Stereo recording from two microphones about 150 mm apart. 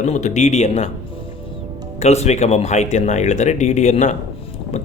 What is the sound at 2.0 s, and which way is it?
Speech, 45° left (ahead or behind).